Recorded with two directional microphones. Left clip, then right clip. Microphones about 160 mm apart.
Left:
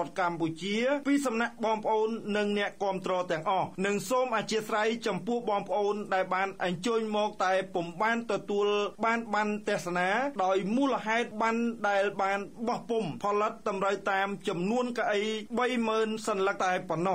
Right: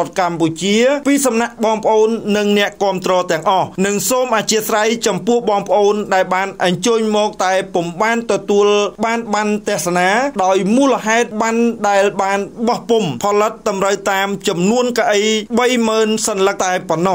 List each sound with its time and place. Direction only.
0.2 s speech: 25° right (ahead or behind)